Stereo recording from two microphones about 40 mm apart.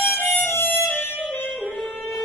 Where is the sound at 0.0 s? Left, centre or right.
Left.